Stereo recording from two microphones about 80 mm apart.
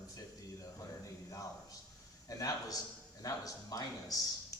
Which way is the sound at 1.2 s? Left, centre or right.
Left.